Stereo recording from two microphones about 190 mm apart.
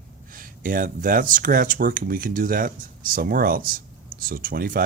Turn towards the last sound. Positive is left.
turn(degrees=-50)  # may be behind; listen again after turning